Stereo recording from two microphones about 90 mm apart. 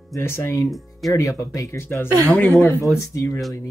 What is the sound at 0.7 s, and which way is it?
Speech, centre (ahead or behind).